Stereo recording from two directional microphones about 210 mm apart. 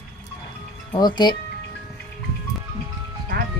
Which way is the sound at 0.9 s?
20° left (ahead or behind).